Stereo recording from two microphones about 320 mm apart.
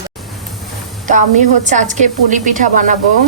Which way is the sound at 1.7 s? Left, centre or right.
Right.